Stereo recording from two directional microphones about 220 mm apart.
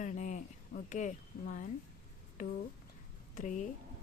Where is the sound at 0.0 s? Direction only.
35° left (ahead or behind).